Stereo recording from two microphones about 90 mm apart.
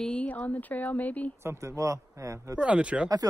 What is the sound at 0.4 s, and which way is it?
Speech, 20° left (ahead or behind).